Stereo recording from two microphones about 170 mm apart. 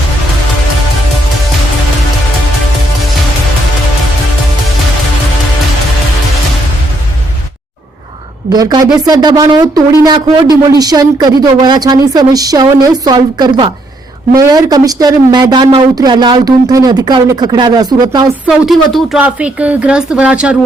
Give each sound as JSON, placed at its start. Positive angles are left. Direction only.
{"t": 8.5, "sound": "speech", "side_deg": -20}
{"t": 18.4, "sound": "speech", "side_deg": -5}